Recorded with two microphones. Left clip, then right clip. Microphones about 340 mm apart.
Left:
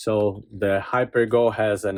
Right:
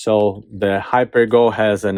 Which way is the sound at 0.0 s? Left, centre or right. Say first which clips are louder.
Right 6 dB; centre.